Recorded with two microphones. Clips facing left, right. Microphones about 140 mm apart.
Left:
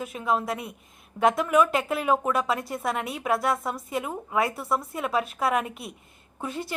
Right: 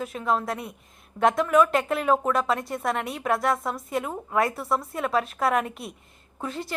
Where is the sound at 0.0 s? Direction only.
5° left (ahead or behind).